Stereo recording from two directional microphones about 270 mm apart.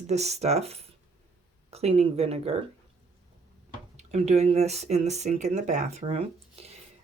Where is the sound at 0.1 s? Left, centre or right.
Right.